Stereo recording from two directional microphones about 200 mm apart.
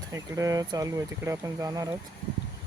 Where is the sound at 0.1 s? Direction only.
15° right (ahead or behind).